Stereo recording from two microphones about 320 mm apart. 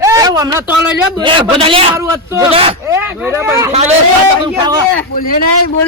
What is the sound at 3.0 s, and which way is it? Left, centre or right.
Speech, centre.